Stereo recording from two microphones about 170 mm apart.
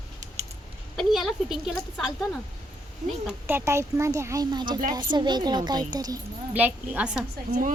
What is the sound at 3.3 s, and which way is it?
A child's voice, 15° right (ahead or behind).